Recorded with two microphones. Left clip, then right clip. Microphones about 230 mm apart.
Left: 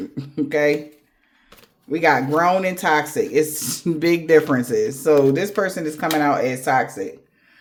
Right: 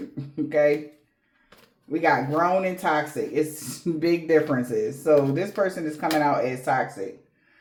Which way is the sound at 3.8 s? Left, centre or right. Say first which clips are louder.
Left 4 dB; left.